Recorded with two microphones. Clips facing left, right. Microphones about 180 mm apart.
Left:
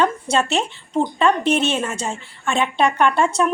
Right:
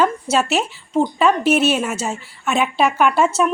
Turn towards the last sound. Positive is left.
turn(degrees=-5)  # may be behind; listen again after turning